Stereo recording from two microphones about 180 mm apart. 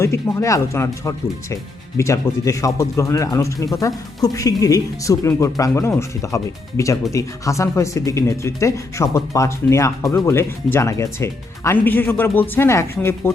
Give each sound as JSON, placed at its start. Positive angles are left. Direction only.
{"t": 0.0, "sound": "speech", "side_deg": 15}